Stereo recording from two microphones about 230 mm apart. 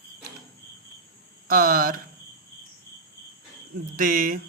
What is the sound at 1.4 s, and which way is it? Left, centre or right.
Speech, right.